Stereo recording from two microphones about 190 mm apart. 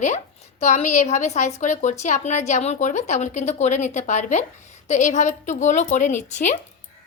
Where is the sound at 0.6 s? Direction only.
40° left (ahead or behind).